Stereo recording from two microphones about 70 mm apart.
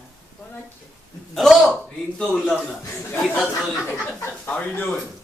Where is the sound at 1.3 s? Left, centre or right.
Centre.